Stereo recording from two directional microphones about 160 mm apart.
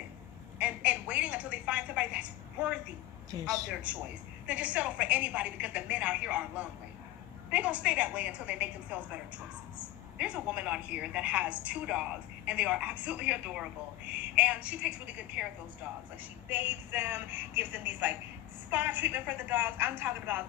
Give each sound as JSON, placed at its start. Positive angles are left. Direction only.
{"t": 0.6, "sound": "a sound", "side_deg": -5}
{"t": 3.3, "sound": "a woman's voice", "side_deg": -20}
{"t": 3.7, "sound": "a woman's voice", "side_deg": -10}
{"t": 16.5, "sound": "a woman's voice", "side_deg": -15}